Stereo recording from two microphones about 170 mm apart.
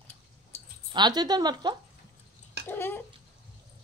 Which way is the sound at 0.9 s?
25° right (ahead or behind).